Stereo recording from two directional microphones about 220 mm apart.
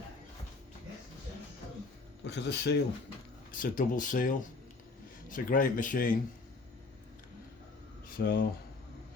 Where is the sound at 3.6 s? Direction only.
40° left (ahead or behind).